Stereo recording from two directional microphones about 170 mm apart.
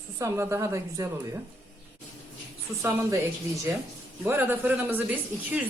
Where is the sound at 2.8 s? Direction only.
15° right (ahead or behind).